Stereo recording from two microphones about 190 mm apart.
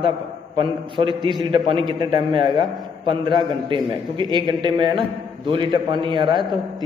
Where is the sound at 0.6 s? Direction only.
25° right (ahead or behind).